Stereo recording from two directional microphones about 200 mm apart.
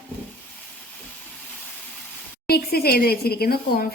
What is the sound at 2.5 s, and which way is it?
A woman's voice, 50° left (ahead or behind).